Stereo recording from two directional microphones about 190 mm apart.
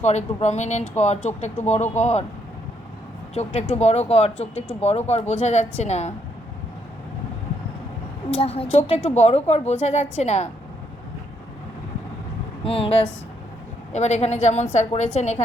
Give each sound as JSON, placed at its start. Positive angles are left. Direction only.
{"t": 0.0, "sound": "speech", "side_deg": 35}
{"t": 3.3, "sound": "speech", "side_deg": 35}
{"t": 8.4, "sound": "speech", "side_deg": 30}
{"t": 12.6, "sound": "speech", "side_deg": 30}